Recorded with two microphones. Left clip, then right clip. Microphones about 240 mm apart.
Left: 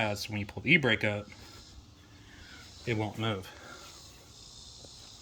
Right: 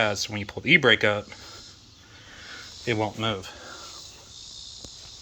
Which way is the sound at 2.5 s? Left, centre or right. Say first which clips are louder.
Right 7 dB; centre.